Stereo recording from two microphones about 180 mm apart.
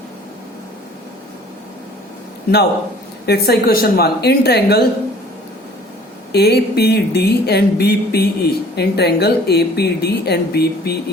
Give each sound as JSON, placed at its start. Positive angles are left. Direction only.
{"t": 3.2, "sound": "speech", "side_deg": 60}
{"t": 6.3, "sound": "speech", "side_deg": 65}